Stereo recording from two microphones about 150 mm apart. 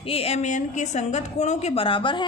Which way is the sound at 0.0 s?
40° left (ahead or behind).